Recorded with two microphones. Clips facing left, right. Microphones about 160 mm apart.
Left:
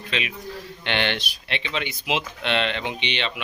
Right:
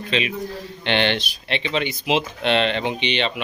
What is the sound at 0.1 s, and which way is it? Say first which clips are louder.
Speech: right 6 dB; 30° right (ahead or behind).